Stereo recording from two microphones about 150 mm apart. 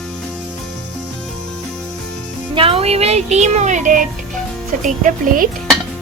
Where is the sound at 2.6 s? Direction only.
40° right (ahead or behind); by 5.5 s 55° right (ahead or behind).